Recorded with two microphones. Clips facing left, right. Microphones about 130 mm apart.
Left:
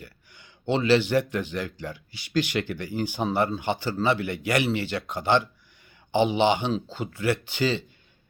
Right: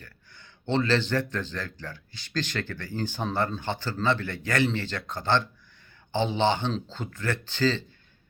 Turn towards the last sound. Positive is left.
turn(degrees=15)  # may be behind; listen again after turning